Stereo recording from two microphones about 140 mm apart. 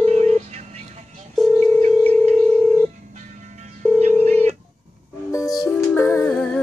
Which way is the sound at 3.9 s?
55° right (ahead or behind).